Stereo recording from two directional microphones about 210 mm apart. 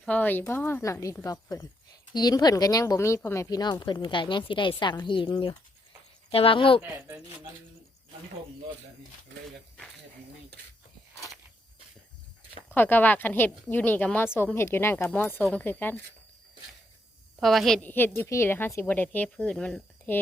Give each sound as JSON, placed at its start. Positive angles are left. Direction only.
{"t": 0.0, "sound": "speech", "side_deg": 5}
{"t": 6.8, "sound": "speech", "side_deg": -10}
{"t": 12.7, "sound": "speech", "side_deg": 10}
{"t": 17.4, "sound": "speech", "side_deg": 0}